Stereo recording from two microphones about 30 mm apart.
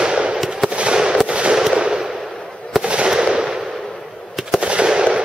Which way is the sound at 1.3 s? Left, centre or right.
Right.